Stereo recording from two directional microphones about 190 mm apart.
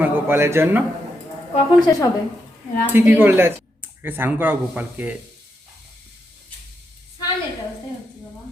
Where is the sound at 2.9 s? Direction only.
10° right (ahead or behind).